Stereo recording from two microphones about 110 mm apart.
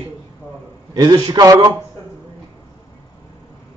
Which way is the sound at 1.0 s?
40° right (ahead or behind).